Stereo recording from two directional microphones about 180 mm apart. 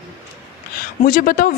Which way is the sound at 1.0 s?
50° left (ahead or behind).